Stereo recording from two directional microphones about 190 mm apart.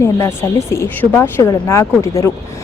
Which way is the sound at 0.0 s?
15° left (ahead or behind).